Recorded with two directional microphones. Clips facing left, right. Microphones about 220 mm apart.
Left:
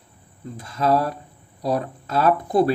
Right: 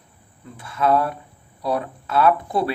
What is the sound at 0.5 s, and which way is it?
Speech, 40° left (ahead or behind).